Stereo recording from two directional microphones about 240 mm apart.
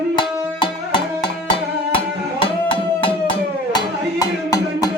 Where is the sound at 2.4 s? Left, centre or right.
Left.